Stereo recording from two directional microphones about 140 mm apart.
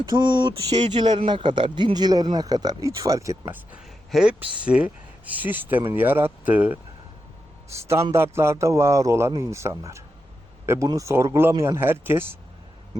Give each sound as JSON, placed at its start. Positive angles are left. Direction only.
{"t": 0.0, "sound": "speech", "side_deg": -30}
{"t": 8.1, "sound": "speech", "side_deg": -20}